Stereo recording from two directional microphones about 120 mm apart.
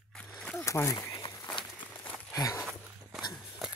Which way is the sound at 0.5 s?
25° left (ahead or behind).